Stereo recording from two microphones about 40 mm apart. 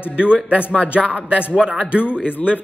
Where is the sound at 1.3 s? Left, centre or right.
Right.